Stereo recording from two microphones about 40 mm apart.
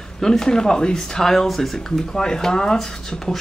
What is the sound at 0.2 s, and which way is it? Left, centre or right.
Speech, centre.